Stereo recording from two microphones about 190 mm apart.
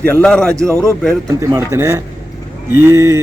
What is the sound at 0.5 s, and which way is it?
A man's voice, 15° right (ahead or behind).